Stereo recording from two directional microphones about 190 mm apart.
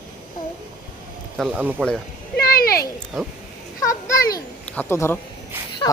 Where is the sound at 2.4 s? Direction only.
50° left (ahead or behind).